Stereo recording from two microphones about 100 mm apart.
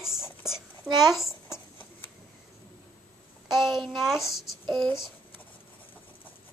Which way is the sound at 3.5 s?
5° right (ahead or behind).